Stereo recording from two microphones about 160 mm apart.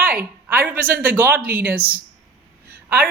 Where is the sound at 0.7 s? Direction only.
10° right (ahead or behind).